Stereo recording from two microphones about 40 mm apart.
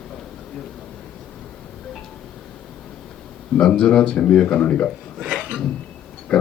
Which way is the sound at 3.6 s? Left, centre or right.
Left.